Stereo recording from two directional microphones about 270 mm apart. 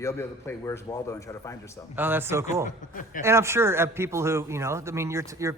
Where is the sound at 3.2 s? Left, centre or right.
Centre.